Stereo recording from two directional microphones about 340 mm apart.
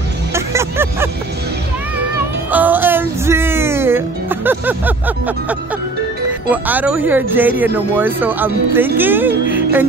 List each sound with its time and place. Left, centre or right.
0.3 s music: centre
2.5 s music: centre
6.5 s speech: centre
9.5 s music: centre